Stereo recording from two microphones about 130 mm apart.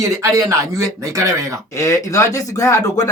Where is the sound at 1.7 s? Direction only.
25° left (ahead or behind).